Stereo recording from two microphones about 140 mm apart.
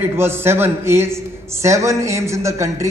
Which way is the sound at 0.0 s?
15° right (ahead or behind).